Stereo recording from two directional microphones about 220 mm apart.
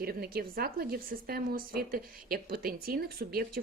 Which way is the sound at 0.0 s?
45° right (ahead or behind).